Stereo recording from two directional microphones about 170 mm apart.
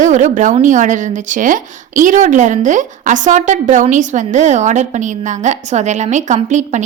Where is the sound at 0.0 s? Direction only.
45° right (ahead or behind).